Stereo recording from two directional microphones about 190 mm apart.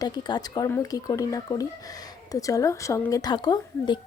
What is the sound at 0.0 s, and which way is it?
Speech, 20° left (ahead or behind).